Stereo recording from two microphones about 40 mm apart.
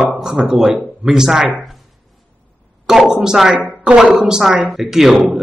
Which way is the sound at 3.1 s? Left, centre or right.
Centre.